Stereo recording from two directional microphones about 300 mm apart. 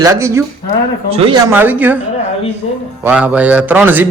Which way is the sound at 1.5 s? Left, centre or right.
Centre.